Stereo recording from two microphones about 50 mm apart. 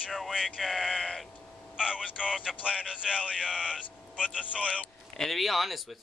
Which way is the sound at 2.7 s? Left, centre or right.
Centre.